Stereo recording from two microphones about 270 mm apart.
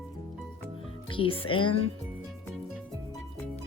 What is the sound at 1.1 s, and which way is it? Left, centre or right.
Speech, centre.